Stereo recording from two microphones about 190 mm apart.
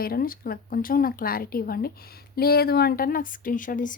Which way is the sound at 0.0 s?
50° left (ahead or behind).